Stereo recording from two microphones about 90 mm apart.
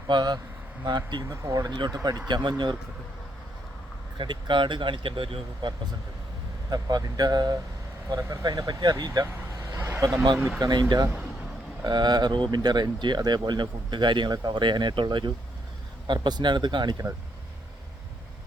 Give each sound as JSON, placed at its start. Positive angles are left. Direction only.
{"t": 0.1, "sound": "speech", "side_deg": -50}
{"t": 1.3, "sound": "speech", "side_deg": -40}
{"t": 2.2, "sound": "speech", "side_deg": -55}
{"t": 4.2, "sound": "speech", "side_deg": -65}
{"t": 6.7, "sound": "speech", "side_deg": -45}
{"t": 9.2, "sound": "vehicle", "side_deg": -30}
{"t": 10.6, "sound": "speech", "side_deg": -55}